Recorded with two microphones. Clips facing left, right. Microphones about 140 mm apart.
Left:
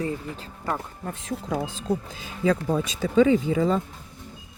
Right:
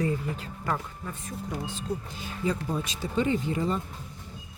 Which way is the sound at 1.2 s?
85° left.